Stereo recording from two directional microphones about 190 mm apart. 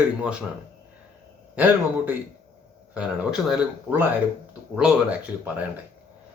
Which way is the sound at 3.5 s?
10° right (ahead or behind).